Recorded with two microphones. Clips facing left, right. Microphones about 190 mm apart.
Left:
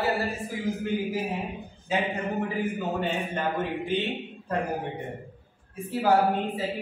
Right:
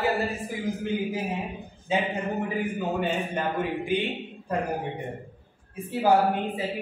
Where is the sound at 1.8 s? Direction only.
15° right (ahead or behind).